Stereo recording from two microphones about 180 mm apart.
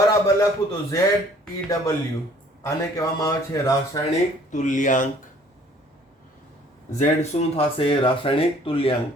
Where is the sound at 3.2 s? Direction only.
20° left (ahead or behind).